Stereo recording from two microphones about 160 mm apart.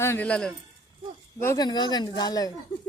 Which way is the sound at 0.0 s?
15° left (ahead or behind).